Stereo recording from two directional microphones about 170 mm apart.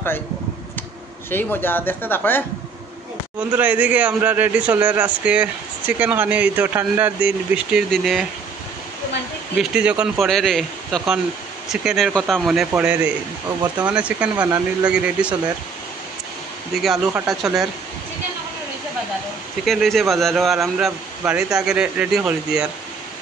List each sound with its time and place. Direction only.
1.3 s speech: 10° left (ahead or behind)
3.3 s a man's voice: 10° right (ahead or behind)
9.6 s a man's voice: 5° right (ahead or behind)
14.4 s speech: 25° right (ahead or behind)
14.9 s a man's voice: 5° right (ahead or behind)
16.8 s speech: centre (ahead or behind)
19.6 s speech: centre (ahead or behind)